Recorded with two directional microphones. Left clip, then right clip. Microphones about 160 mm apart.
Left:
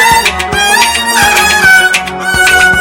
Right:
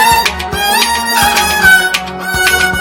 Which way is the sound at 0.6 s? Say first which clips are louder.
Left 3 dB; 25° left (ahead or behind).